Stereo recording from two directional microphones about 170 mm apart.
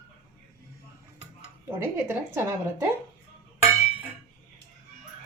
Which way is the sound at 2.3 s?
15° right (ahead or behind).